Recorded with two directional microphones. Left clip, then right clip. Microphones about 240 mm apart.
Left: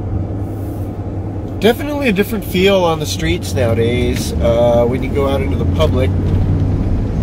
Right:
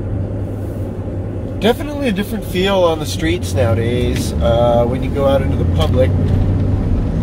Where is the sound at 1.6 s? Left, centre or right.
Left.